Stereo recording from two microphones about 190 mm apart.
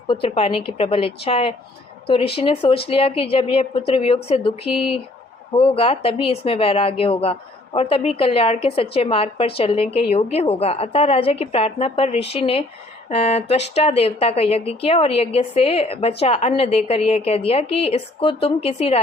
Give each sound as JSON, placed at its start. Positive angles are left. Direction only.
{"t": 0.1, "sound": "a woman's voice", "side_deg": 30}